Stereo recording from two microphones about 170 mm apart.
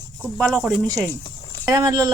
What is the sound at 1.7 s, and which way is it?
Speech, 20° right (ahead or behind).